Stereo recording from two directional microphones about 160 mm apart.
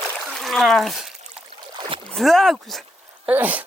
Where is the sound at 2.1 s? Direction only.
Centre (ahead or behind).